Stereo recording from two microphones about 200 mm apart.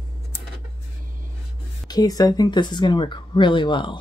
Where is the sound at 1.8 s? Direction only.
20° left (ahead or behind).